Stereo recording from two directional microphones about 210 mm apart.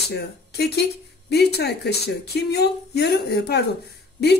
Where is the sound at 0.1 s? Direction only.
50° left (ahead or behind).